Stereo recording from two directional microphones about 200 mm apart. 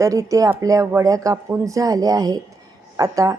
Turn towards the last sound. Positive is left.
turn(degrees=-15)  # may be behind; listen again after turning